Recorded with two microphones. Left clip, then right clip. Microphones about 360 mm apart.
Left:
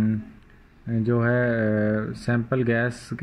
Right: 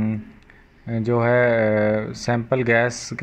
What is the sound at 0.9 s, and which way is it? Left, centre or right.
Speech, right.